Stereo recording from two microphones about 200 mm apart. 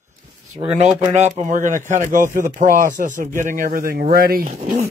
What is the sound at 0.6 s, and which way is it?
Speech, 30° right (ahead or behind).